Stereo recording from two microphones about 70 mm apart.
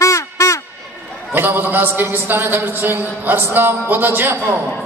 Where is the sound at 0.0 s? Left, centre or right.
Left.